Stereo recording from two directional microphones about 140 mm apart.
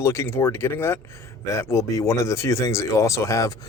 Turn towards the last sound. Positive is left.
turn(degrees=25)  # may be behind; listen again after turning